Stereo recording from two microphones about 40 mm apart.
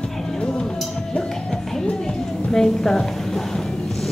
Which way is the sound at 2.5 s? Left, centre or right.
Centre.